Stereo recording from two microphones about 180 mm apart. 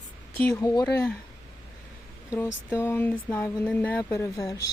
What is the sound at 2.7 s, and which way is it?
Speech, 10° left (ahead or behind).